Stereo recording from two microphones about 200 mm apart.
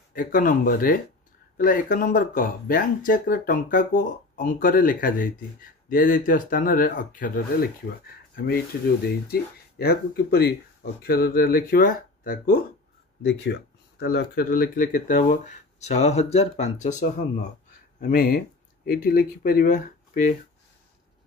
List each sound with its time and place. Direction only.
0.1 s speech: 45° left (ahead or behind)
13.2 s speech: 60° left (ahead or behind); by 17.5 s 35° left (ahead or behind)
18.0 s speech: 45° left (ahead or behind)